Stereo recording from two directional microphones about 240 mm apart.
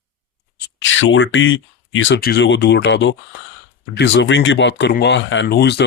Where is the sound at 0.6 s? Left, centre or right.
Left.